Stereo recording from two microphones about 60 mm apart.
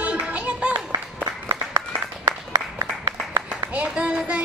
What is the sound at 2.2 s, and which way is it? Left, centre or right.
Applause, right.